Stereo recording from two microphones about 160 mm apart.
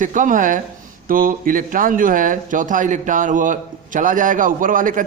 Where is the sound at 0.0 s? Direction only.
55° right (ahead or behind).